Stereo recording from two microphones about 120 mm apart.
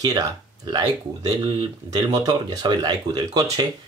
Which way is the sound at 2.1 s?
30° right (ahead or behind).